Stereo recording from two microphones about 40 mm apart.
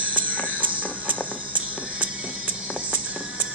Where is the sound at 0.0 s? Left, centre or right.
Right.